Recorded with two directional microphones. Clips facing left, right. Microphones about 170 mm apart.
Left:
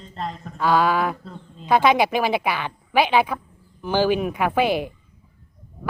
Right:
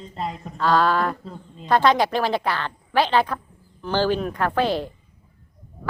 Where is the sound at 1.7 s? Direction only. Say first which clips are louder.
Left 1 dB; 10° left (ahead or behind).